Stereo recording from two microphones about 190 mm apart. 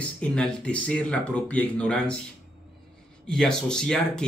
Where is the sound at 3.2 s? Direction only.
5° left (ahead or behind).